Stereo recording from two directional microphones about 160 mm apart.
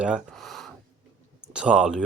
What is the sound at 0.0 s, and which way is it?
Gasp, 5° right (ahead or behind).